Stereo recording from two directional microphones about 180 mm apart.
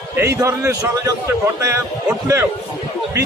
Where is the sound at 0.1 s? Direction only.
15° right (ahead or behind).